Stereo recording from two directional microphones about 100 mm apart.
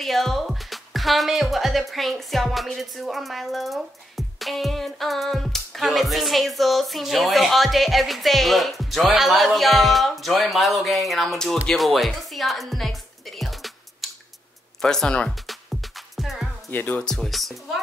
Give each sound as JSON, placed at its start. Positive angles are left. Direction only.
{"t": 0.0, "sound": "a woman's voice", "side_deg": 0}
{"t": 4.4, "sound": "music", "side_deg": 0}
{"t": 16.7, "sound": "speech", "side_deg": 20}
{"t": 17.0, "sound": "music", "side_deg": 5}